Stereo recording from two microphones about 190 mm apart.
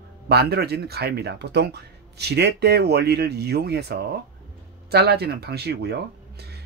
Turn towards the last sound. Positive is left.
turn(degrees=-60)  # may be behind; listen again after turning